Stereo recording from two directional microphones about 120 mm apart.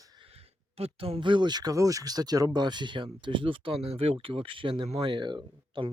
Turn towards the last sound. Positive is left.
turn(degrees=-40)  # may be behind; listen again after turning